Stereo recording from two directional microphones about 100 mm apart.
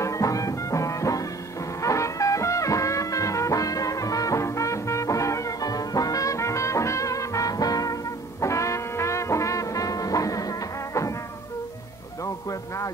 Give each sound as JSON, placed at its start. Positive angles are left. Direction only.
{"t": 0.0, "sound": "music", "side_deg": 35}
{"t": 12.4, "sound": "music", "side_deg": 35}